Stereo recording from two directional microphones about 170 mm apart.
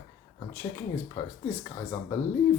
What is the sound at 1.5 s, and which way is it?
Speech, 15° left (ahead or behind).